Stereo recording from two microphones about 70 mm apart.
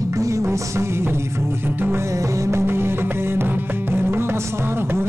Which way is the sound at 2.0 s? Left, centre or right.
Right.